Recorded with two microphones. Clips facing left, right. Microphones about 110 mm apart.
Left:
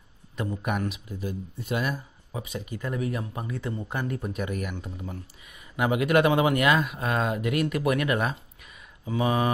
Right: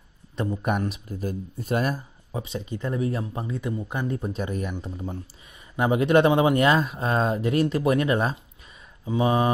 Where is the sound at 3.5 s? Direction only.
15° right (ahead or behind).